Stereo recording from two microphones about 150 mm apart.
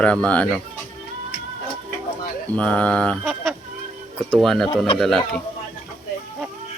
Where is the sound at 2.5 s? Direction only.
10° left (ahead or behind).